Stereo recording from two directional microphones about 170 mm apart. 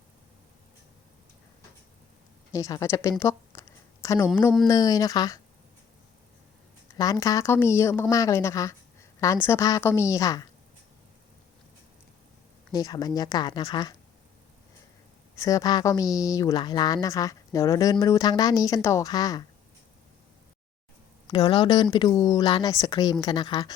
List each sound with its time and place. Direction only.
2.5 s a sound: 20° left (ahead or behind)
4.7 s a woman's voice: 20° left (ahead or behind)
6.9 s a woman's voice: 20° left (ahead or behind)
12.7 s a woman's voice: 20° left (ahead or behind)
15.4 s a woman's voice: 20° left (ahead or behind)
21.3 s a woman's voice: 30° left (ahead or behind)